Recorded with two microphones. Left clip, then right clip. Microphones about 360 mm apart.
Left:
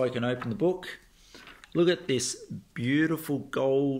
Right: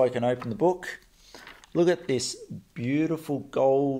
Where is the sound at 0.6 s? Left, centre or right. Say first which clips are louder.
Right 3 dB; centre.